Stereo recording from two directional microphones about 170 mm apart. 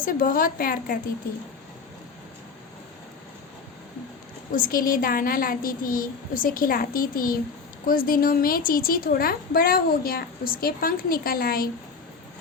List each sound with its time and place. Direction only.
0.0 s a woman's voice: 55° left (ahead or behind)
4.5 s a woman's voice: 55° left (ahead or behind)